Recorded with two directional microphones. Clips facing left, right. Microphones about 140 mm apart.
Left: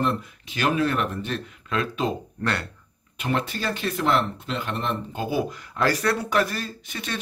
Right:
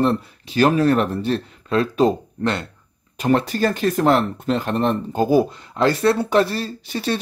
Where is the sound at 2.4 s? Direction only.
20° right (ahead or behind).